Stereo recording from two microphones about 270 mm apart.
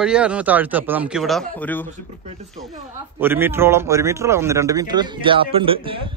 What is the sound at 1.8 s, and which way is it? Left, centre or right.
Speech, right.